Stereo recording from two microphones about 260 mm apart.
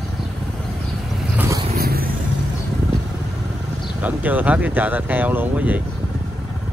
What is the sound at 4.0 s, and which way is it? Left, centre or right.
Speech, centre.